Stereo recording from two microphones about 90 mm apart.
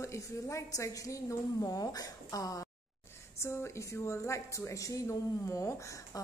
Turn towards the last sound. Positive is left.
turn(degrees=35)  # may be behind; listen again after turning